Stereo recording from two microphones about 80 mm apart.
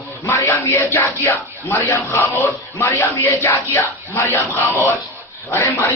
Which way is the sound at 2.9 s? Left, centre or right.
Left.